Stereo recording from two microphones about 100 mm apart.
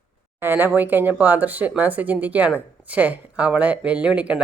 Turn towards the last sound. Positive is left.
turn(degrees=-10)  # may be behind; listen again after turning